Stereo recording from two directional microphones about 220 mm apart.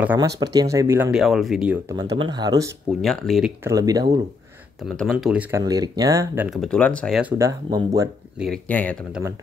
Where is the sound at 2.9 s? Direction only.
Centre (ahead or behind); by 4.2 s 15° right (ahead or behind).